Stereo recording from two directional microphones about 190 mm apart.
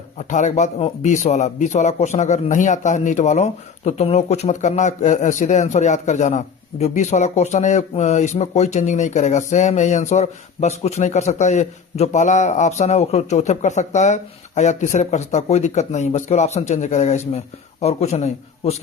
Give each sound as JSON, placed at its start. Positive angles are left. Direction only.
{"t": 0.2, "sound": "speech", "side_deg": 40}